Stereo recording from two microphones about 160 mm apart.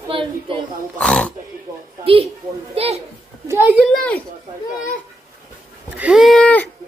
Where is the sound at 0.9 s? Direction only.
5° left (ahead or behind).